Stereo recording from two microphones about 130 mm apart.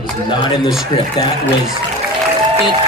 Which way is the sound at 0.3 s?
35° left (ahead or behind).